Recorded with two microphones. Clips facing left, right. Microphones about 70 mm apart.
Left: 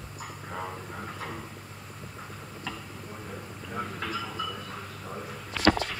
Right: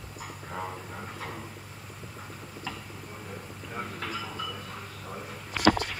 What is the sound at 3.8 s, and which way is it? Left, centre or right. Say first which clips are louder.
Train: left 2 dB; centre.